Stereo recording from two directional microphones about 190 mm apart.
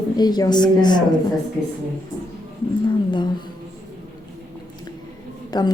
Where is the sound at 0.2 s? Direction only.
20° left (ahead or behind).